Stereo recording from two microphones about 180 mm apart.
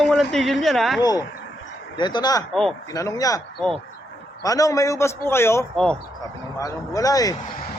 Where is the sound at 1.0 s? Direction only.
20° left (ahead or behind).